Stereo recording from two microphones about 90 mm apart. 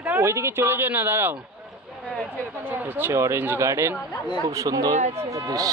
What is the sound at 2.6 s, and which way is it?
A man's voice, 20° right (ahead or behind).